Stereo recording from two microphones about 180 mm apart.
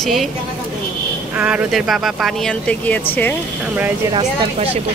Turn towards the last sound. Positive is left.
turn(degrees=-30)  # may be behind; listen again after turning